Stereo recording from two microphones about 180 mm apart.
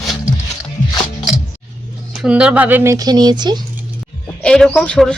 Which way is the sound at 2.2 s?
5° right (ahead or behind).